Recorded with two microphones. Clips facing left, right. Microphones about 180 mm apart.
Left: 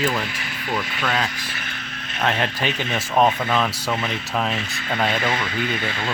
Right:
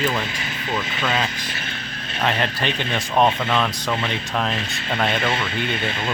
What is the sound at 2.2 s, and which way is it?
Speech, 5° left (ahead or behind).